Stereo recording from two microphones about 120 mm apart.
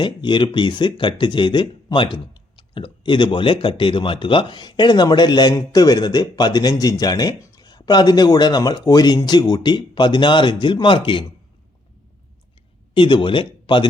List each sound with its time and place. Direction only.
0.0 s speech: 40° left (ahead or behind)
12.9 s speech: 45° left (ahead or behind)